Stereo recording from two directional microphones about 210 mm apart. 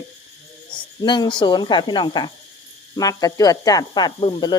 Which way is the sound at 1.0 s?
20° left (ahead or behind).